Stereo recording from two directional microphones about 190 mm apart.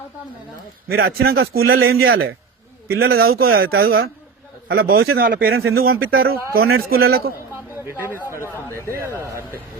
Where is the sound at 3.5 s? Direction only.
55° right (ahead or behind).